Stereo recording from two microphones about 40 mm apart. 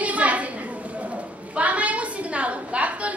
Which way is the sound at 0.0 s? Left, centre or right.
Right.